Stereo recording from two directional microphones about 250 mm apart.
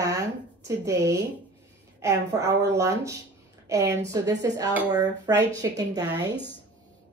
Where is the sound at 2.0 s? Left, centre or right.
Centre.